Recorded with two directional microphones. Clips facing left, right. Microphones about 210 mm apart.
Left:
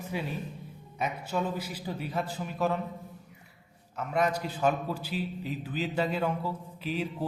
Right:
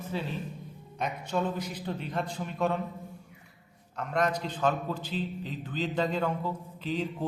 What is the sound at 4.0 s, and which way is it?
A man's voice, 5° left (ahead or behind).